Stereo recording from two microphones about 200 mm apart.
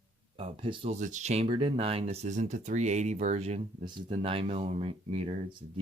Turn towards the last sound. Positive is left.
turn(degrees=-30)  # may be behind; listen again after turning